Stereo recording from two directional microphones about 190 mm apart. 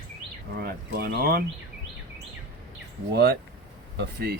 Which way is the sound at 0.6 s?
55° right (ahead or behind).